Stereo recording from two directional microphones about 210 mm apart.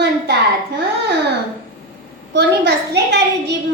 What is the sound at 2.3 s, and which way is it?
A child's voice, 55° right (ahead or behind).